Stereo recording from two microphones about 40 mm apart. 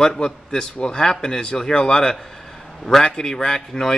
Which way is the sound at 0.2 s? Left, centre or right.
Centre.